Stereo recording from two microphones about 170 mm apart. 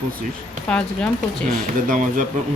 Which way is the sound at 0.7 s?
5° left (ahead or behind).